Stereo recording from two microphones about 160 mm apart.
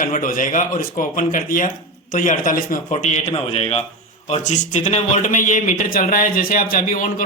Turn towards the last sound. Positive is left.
turn(degrees=60)  # may be behind; listen again after turning